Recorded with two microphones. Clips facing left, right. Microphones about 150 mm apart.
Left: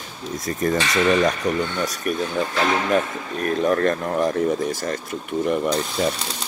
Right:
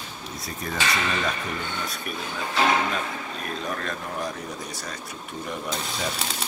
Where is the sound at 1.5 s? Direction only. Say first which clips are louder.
Left 11 dB; 75° left (ahead or behind).